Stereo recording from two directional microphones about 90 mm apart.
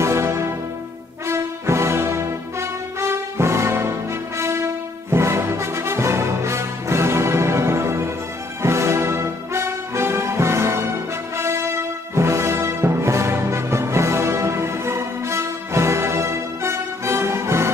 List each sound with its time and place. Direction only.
0.0 s music: 30° right (ahead or behind)
8.6 s brass instrument: 30° right (ahead or behind)
11.3 s music: 30° right (ahead or behind)